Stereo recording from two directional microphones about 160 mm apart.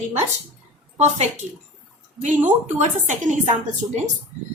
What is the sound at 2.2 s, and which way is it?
A woman's voice, 50° right (ahead or behind).